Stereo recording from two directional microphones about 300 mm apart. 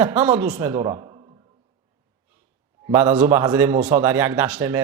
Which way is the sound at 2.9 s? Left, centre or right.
Centre.